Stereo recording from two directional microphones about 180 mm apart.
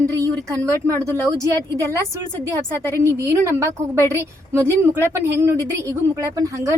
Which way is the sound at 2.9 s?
15° right (ahead or behind).